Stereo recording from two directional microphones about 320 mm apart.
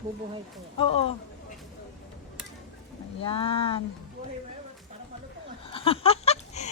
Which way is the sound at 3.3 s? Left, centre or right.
Centre.